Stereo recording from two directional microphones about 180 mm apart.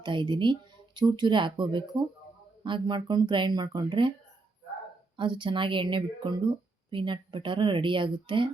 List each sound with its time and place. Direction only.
0.0 s speech: 25° right (ahead or behind)
5.1 s speech: 25° right (ahead or behind)